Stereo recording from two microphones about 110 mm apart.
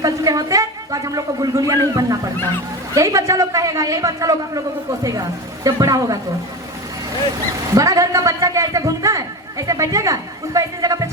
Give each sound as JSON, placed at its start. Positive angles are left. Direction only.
{"t": 0.0, "sound": "a man's voice", "side_deg": -35}
{"t": 7.7, "sound": "a man's voice", "side_deg": -30}